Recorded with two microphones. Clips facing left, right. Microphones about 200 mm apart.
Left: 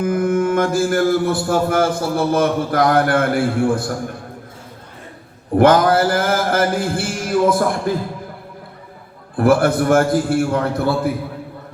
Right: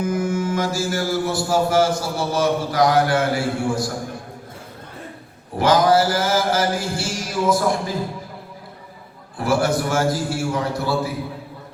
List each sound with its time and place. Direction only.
0.0 s mantra: 55° left (ahead or behind)
5.5 s mantra: 55° left (ahead or behind)
9.4 s mantra: 55° left (ahead or behind)